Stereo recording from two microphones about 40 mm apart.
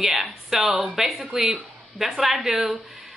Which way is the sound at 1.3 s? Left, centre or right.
Right.